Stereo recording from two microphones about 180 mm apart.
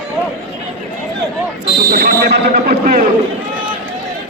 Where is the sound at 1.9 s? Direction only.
55° right (ahead or behind).